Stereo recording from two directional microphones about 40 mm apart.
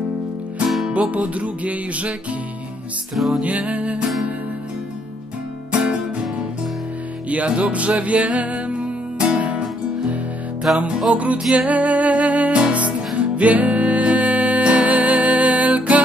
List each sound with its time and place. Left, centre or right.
0.7 s music: centre
1.1 s music: right
3.4 s music: right
7.2 s music: right
10.7 s music: centre
11.1 s music: right